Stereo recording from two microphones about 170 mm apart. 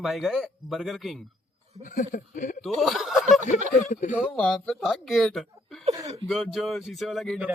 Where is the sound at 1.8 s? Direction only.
50° left (ahead or behind).